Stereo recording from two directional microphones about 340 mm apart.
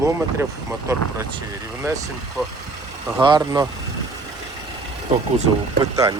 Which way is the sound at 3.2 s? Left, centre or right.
Centre.